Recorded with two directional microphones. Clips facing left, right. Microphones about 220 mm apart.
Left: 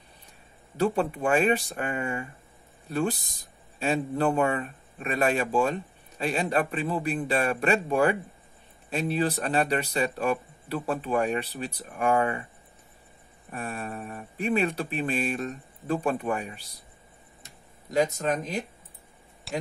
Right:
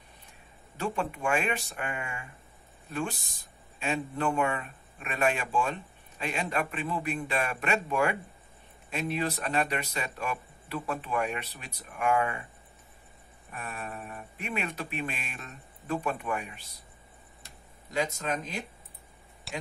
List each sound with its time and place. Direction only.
0.7 s speech: 35° left (ahead or behind)
13.5 s speech: 35° left (ahead or behind)
17.9 s speech: 45° left (ahead or behind)
19.5 s speech: centre (ahead or behind)